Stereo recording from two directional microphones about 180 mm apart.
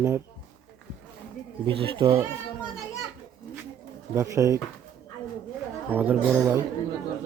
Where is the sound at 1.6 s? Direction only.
25° right (ahead or behind).